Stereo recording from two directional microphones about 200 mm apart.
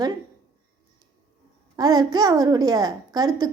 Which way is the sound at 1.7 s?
20° right (ahead or behind).